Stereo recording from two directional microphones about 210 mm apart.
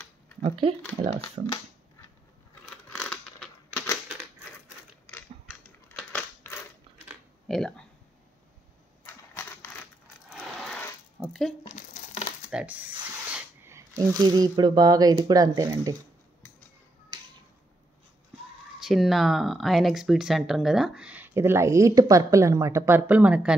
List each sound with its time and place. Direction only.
0.4 s speech: 25° right (ahead or behind)
2.6 s a sound: 5° left (ahead or behind)
5.9 s crushing: 10° left (ahead or behind)
7.4 s speech: centre (ahead or behind)
9.0 s crushing: 10° left (ahead or behind)
10.3 s a sound: centre (ahead or behind)
11.1 s speech: centre (ahead or behind)
11.6 s crumpling: 35° left (ahead or behind)
12.4 s speech: 5° right (ahead or behind)
18.8 s speech: centre (ahead or behind)